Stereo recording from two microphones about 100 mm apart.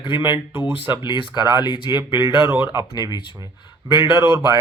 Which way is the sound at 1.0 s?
50° left (ahead or behind).